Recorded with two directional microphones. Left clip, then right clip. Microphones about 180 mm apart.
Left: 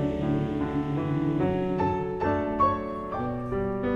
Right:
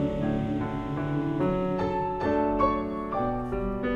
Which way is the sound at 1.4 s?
20° right (ahead or behind).